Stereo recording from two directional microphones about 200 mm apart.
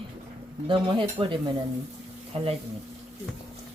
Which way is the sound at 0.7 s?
25° right (ahead or behind).